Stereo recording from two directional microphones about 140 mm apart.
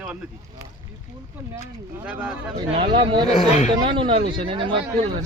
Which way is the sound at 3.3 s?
55° left (ahead or behind).